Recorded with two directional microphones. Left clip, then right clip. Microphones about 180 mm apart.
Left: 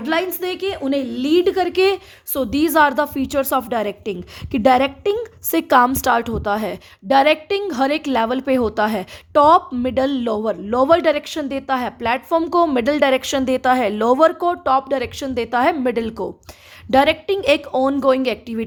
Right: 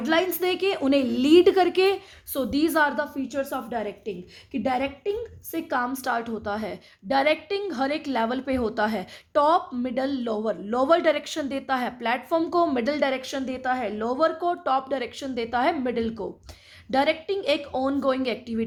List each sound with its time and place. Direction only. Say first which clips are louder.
0.0 s a woman's voice: left 3 dB; 15° left (ahead or behind)
0.3 s a woman's voice: left 1 dB; centre (ahead or behind)
1.7 s a woman's voice: left 5 dB; 15° left (ahead or behind)